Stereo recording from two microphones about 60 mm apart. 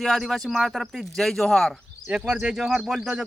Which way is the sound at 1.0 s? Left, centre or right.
Centre.